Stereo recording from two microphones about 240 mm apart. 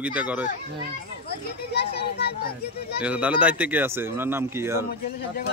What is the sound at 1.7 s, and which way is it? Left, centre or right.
A child's voice, left.